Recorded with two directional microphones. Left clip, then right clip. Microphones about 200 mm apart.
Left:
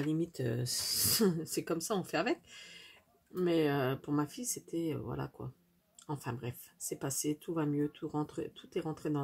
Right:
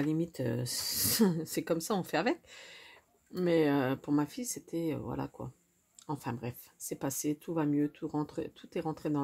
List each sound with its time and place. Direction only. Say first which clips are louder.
0.1 s speech: right 2 dB; 40° right (ahead or behind)